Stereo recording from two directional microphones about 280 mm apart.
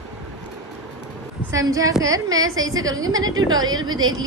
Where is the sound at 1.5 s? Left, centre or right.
Centre.